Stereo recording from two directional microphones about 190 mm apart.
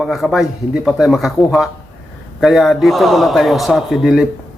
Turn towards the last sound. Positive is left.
turn(degrees=0)  # may be behind; listen again after turning